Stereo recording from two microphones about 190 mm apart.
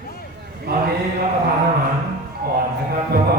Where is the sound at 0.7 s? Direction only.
55° right (ahead or behind).